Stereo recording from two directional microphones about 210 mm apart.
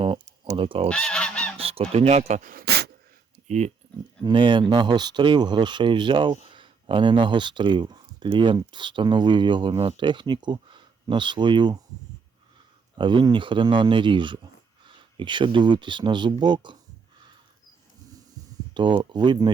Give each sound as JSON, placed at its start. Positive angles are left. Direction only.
{"t": 0.0, "sound": "speech", "side_deg": -25}
{"t": 0.9, "sound": "goose", "side_deg": 5}
{"t": 1.5, "sound": "speech", "side_deg": -25}
{"t": 3.4, "sound": "speech", "side_deg": -35}
{"t": 4.2, "sound": "speech", "side_deg": -20}
{"t": 13.0, "sound": "speech", "side_deg": -20}
{"t": 18.7, "sound": "speech", "side_deg": -20}